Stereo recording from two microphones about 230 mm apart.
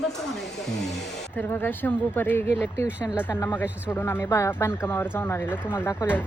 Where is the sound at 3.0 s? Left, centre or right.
Centre.